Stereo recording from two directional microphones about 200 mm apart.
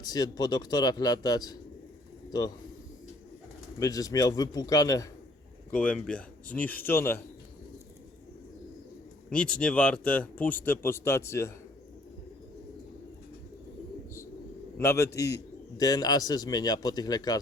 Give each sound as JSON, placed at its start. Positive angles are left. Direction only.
{"t": 0.0, "sound": "speech", "side_deg": 20}
{"t": 3.8, "sound": "speech", "side_deg": 15}
{"t": 5.7, "sound": "speech", "side_deg": 5}
{"t": 9.3, "sound": "speech", "side_deg": 5}
{"t": 14.8, "sound": "speech", "side_deg": 15}